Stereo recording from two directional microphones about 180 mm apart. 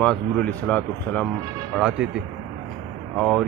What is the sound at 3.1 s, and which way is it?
Speech, centre (ahead or behind).